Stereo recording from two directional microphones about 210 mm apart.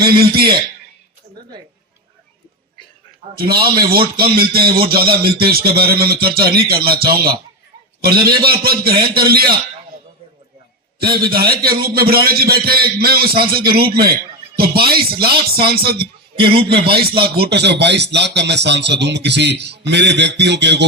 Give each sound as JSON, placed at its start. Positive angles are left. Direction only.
{"t": 0.0, "sound": "a man's voice", "side_deg": -45}
{"t": 3.3, "sound": "a man's voice", "side_deg": -45}
{"t": 11.0, "sound": "a man's voice", "side_deg": -45}